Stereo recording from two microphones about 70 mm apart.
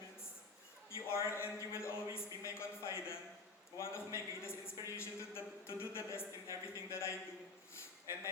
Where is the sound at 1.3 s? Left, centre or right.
Left.